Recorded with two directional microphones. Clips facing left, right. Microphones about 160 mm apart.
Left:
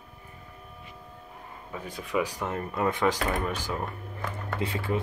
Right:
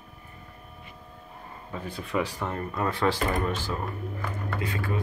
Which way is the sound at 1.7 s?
15° left (ahead or behind).